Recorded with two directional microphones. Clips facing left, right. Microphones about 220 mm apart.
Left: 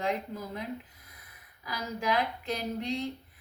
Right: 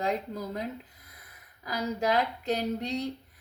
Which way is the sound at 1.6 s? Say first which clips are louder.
Right 4 dB; 40° right (ahead or behind).